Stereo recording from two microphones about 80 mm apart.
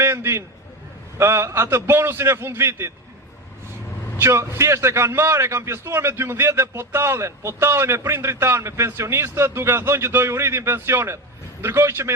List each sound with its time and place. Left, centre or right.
0.0 s a man's voice: right
4.2 s a man's voice: right